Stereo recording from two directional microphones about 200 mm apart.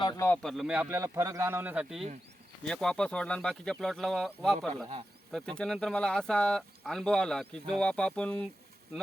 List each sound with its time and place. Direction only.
0.0 s speech: 15° left (ahead or behind)
0.4 s a man's voice: centre (ahead or behind)